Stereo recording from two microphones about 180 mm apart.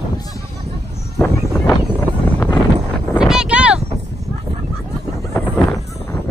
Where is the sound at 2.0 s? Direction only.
10° left (ahead or behind).